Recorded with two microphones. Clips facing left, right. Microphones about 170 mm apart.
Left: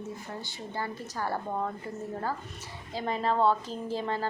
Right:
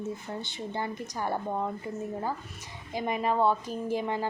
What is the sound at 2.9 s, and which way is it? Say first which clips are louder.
A woman's voice: right 1 dB; 15° right (ahead or behind).